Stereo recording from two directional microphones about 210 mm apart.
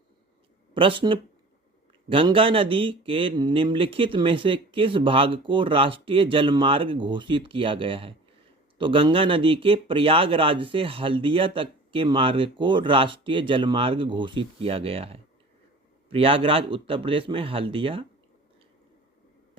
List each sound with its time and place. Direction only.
0.7 s speech: 25° right (ahead or behind)